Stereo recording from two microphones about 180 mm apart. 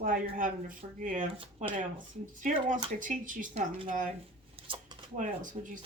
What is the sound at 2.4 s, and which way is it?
A woman's voice, 45° right (ahead or behind).